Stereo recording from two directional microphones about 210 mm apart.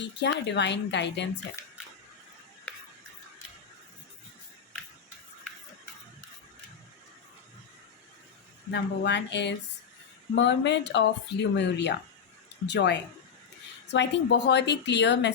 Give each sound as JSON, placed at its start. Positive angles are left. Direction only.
{"t": 0.3, "sound": "speech", "side_deg": 55}
{"t": 1.6, "sound": "speech", "side_deg": 15}
{"t": 2.7, "sound": "music", "side_deg": 5}
{"t": 8.7, "sound": "speech", "side_deg": 55}